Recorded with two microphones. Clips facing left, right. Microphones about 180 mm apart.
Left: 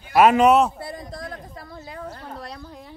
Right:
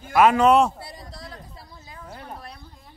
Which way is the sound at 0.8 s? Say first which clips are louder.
Left 7 dB; 50° left (ahead or behind).